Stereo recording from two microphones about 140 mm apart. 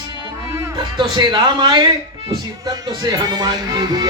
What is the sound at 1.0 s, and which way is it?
Music, 35° right (ahead or behind).